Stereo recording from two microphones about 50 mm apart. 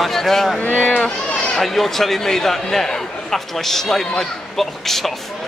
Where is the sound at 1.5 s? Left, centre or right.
Centre.